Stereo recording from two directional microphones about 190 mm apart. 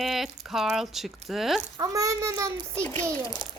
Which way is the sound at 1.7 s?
20° right (ahead or behind).